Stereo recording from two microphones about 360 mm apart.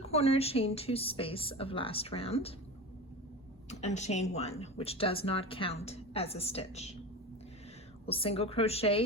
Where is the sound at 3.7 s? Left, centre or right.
Centre.